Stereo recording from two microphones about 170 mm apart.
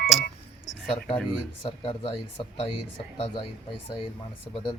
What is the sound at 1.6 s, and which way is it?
Speech, 35° left (ahead or behind).